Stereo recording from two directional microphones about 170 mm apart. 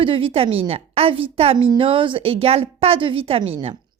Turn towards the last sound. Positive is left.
turn(degrees=-35)  # may be behind; listen again after turning